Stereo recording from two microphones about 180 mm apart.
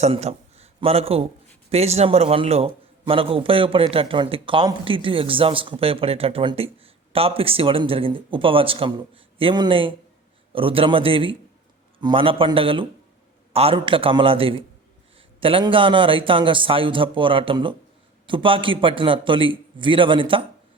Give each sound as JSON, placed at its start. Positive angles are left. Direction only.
{"t": 0.0, "sound": "a man's voice", "side_deg": -35}